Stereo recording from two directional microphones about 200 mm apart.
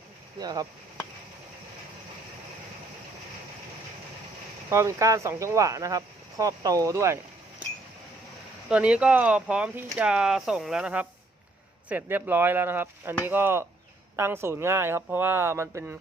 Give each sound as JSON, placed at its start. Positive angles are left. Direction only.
{"t": 0.3, "sound": "speech", "side_deg": -20}
{"t": 4.7, "sound": "speech", "side_deg": -15}
{"t": 8.7, "sound": "speech", "side_deg": -5}